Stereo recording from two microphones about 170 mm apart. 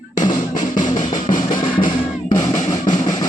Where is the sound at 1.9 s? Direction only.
25° left (ahead or behind).